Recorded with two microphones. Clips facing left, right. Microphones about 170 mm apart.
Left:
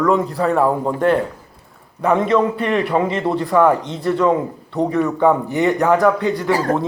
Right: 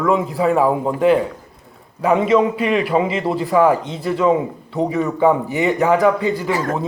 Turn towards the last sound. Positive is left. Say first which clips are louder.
# left 3 dB
turn(degrees=30)  # may be behind; listen again after turning